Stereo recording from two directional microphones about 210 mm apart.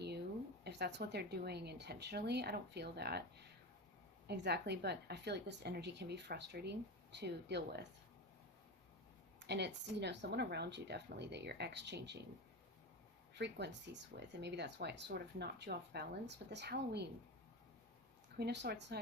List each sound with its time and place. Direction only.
0.6 s a woman's voice: 55° right (ahead or behind)
9.4 s speech: 55° right (ahead or behind)
13.3 s a woman's voice: 55° right (ahead or behind)
18.3 s a woman's voice: 50° right (ahead or behind)